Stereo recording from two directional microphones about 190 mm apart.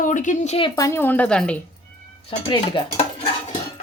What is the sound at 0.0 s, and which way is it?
Speech, 40° left (ahead or behind).